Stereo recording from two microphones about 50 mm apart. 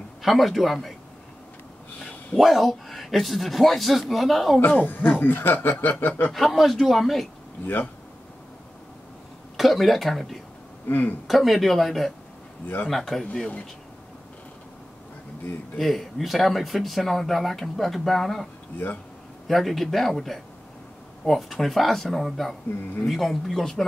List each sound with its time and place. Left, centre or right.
0.2 s speech: centre
2.3 s speech: centre
4.6 s speech: left
6.3 s speech: centre
7.6 s speech: left
9.6 s speech: centre
10.9 s speech: left
11.2 s speech: centre
15.8 s speech: centre